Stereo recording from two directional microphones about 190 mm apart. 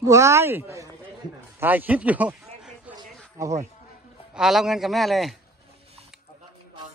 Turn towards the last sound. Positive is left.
turn(degrees=0)  # may be behind; listen again after turning